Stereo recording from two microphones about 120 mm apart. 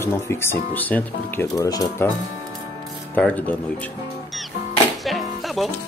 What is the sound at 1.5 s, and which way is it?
Speech, 30° left (ahead or behind).